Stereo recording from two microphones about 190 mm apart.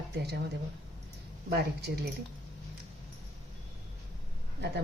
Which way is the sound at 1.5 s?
60° right (ahead or behind).